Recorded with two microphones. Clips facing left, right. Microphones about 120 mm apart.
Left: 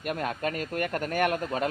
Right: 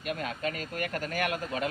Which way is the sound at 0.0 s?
45° left (ahead or behind).